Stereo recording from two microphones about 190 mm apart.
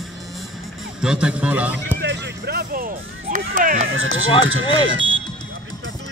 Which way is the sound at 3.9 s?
90° right.